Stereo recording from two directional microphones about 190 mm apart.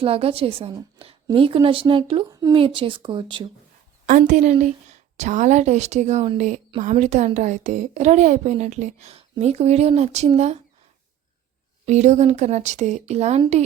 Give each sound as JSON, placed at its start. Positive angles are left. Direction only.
{"t": 0.0, "sound": "speech", "side_deg": -30}
{"t": 4.3, "sound": "a woman's voice", "side_deg": -40}
{"t": 11.9, "sound": "a woman's voice", "side_deg": -40}